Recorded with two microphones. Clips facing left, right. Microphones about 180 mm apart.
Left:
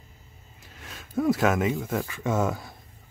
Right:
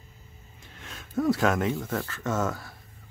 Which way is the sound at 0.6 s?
5° left (ahead or behind).